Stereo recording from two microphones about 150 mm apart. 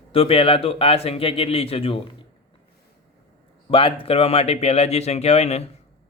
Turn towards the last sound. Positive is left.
turn(degrees=45)  # may be behind; listen again after turning